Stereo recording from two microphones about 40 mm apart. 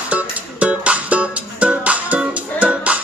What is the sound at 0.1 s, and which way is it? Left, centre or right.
Music, right.